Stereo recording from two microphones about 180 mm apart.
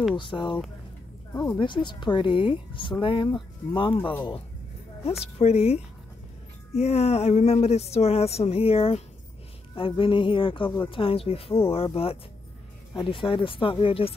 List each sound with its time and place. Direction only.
0.1 s speech: 25° left (ahead or behind)
1.3 s speech: 15° left (ahead or behind)
1.6 s speech: 25° left (ahead or behind)
5.2 s speech: 35° left (ahead or behind)